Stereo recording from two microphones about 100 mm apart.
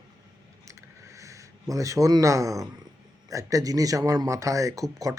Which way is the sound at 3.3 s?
35° right (ahead or behind).